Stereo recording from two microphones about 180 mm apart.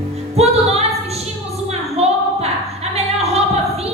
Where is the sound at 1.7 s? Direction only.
35° right (ahead or behind).